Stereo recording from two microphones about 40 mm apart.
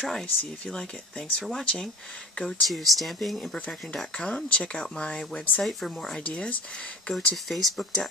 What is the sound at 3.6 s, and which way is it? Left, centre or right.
Speech, centre.